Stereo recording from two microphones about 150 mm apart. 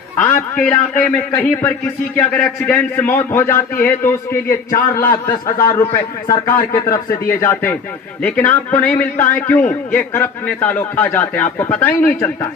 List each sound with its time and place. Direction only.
0.2 s a man's voice: 10° left (ahead or behind)
7.3 s a man's voice: 15° left (ahead or behind)